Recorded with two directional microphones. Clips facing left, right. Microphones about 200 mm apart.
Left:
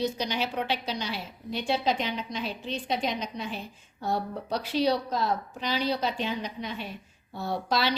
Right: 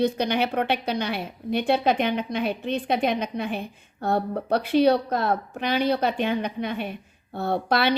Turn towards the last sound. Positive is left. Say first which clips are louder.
# right 5 dB
turn(degrees=-60)  # may be behind; listen again after turning